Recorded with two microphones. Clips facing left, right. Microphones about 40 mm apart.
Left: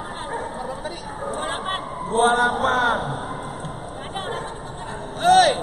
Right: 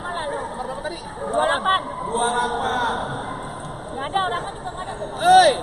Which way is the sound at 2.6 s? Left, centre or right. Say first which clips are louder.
Left 3 dB; centre.